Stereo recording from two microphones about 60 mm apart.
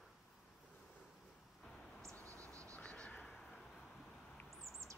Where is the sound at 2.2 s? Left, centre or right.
Right.